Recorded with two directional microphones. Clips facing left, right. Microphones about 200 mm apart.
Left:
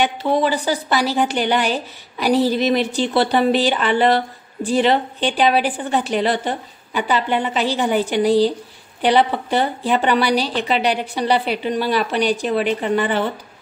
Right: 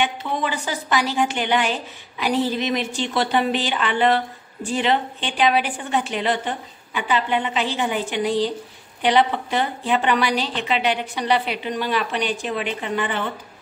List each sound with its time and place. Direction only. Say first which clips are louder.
0.0 s a woman's voice: left 6 dB; 35° left (ahead or behind)